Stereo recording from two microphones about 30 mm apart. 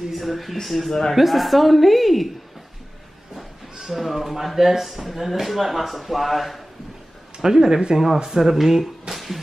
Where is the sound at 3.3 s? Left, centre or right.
Centre.